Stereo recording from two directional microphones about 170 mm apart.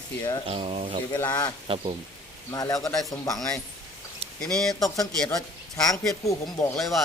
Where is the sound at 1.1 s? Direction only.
20° left (ahead or behind).